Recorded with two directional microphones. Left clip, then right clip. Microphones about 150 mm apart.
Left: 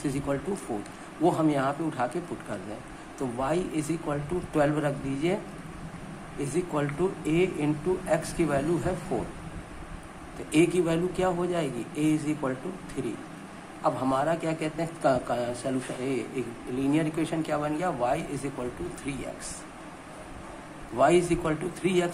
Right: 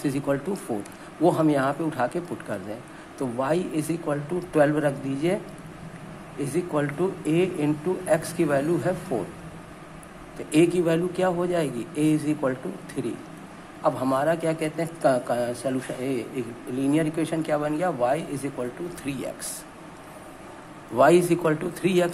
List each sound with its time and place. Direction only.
0.0 s a man's voice: 25° right (ahead or behind)
3.2 s a man's voice: 25° right (ahead or behind)
6.4 s a man's voice: 20° right (ahead or behind)
10.5 s a man's voice: 25° right (ahead or behind)
20.9 s a man's voice: 40° right (ahead or behind)